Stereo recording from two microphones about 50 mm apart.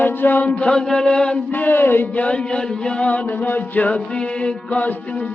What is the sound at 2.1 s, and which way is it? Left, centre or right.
Music, left.